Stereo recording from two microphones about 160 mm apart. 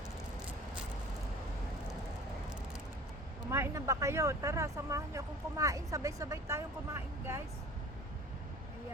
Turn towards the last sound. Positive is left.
turn(degrees=-15)  # may be behind; listen again after turning